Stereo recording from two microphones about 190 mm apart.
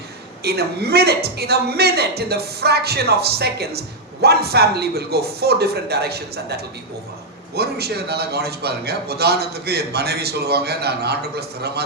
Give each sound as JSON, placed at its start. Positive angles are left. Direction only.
{"t": 0.4, "sound": "speech", "side_deg": -55}